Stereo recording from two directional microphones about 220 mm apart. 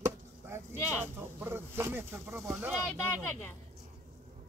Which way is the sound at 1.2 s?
10° right (ahead or behind).